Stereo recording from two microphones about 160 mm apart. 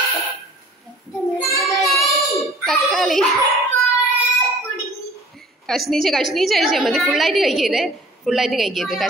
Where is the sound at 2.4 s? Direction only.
Centre (ahead or behind).